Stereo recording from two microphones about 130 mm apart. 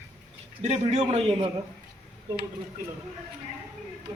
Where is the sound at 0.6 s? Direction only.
55° right (ahead or behind).